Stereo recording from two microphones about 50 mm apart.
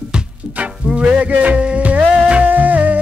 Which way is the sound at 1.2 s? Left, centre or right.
Right.